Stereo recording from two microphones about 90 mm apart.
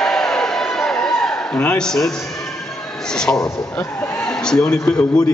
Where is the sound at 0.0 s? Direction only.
5° left (ahead or behind).